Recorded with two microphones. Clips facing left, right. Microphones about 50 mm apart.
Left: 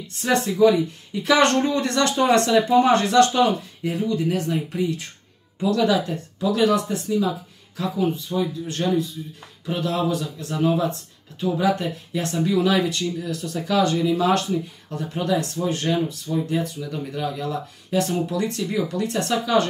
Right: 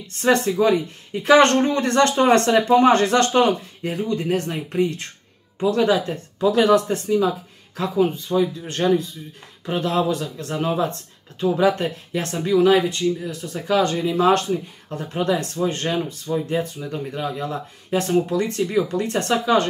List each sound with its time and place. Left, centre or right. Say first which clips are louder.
0.1 s speech: right 4 dB; right
5.6 s speech: right 1 dB; right
12.5 s speech: right 6 dB; right